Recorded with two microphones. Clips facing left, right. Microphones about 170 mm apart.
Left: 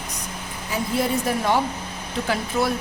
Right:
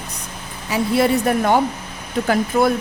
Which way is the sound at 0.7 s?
75° right (ahead or behind).